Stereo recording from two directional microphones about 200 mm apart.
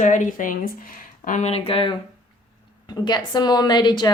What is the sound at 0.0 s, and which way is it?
A woman's voice, 40° left (ahead or behind).